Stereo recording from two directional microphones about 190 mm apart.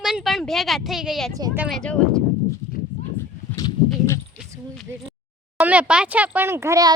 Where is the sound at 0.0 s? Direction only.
Centre (ahead or behind).